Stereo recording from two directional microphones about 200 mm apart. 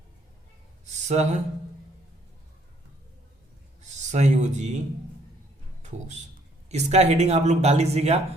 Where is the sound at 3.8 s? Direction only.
35° right (ahead or behind).